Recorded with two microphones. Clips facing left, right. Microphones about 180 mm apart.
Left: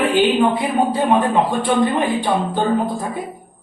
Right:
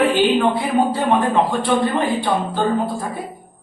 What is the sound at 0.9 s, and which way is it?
A man's voice, 15° left (ahead or behind).